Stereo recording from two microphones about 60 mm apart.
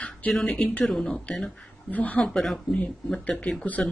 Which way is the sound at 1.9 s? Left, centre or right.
Left.